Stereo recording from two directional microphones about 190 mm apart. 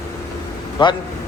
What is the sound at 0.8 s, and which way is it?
Speech, 25° left (ahead or behind).